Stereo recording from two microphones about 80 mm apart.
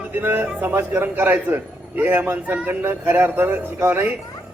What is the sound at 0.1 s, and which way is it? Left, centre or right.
A man's voice, right.